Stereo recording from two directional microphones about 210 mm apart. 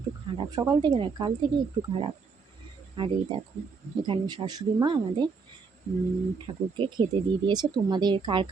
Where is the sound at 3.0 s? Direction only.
20° right (ahead or behind).